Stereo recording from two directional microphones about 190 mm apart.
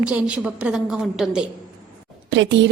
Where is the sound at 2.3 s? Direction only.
70° right (ahead or behind).